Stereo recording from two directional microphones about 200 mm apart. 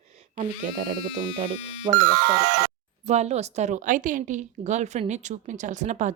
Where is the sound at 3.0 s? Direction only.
35° right (ahead or behind).